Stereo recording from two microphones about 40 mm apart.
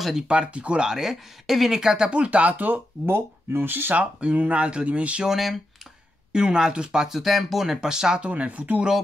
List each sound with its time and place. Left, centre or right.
0.3 s speech: right
0.8 s speech: centre
2.0 s speech: right
2.5 s speech: right
3.1 s speech: right
3.9 s speech: right
5.2 s speech: centre
6.3 s speech: centre
7.1 s speech: centre
8.2 s speech: right